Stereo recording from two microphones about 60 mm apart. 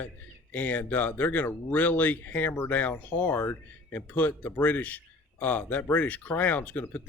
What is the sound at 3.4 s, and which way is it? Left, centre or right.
Speech, left.